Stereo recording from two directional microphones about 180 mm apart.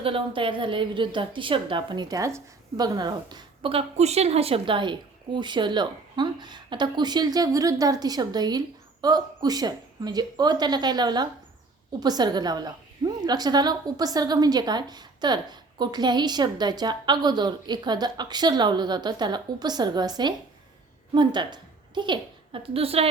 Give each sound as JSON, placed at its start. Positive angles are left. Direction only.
{"t": 0.0, "sound": "a woman's voice", "side_deg": -30}